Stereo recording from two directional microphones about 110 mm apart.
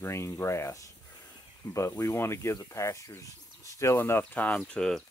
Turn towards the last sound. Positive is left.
turn(degrees=5)  # may be behind; listen again after turning